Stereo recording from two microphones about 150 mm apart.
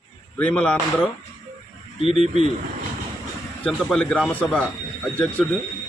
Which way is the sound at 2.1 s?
45° right (ahead or behind).